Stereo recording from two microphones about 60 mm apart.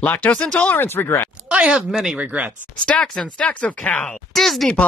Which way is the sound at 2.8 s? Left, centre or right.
Centre.